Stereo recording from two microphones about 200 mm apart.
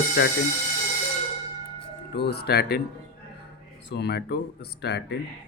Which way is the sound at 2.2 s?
55° left (ahead or behind).